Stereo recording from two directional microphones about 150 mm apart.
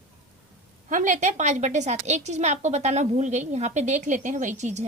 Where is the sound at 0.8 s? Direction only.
55° right (ahead or behind).